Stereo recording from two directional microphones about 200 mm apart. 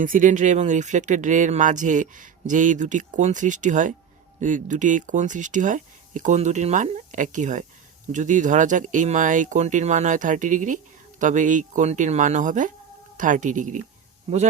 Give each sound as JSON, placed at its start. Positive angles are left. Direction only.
{"t": 0.0, "sound": "speech", "side_deg": -40}